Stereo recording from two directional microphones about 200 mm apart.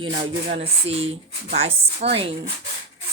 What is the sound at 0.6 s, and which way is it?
Speech, 30° right (ahead or behind).